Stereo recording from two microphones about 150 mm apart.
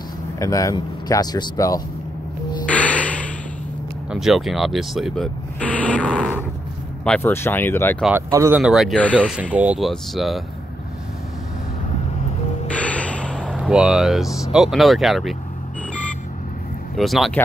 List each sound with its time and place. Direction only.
0.4 s speech: 20° left (ahead or behind)
2.6 s music: 10° left (ahead or behind)
4.1 s speech: centre (ahead or behind); by 8.0 s 15° left (ahead or behind)
8.3 s speech: 20° right (ahead or behind)
8.5 s speech: 5° right (ahead or behind)
8.9 s speech: 10° left (ahead or behind)
9.3 s speech: 10° right (ahead or behind)
12.7 s music: 10° left (ahead or behind)
13.4 s speech: 5° right (ahead or behind)
16.9 s speech: centre (ahead or behind)